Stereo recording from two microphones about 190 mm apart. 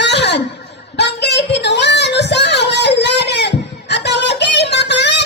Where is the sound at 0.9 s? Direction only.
65° left (ahead or behind).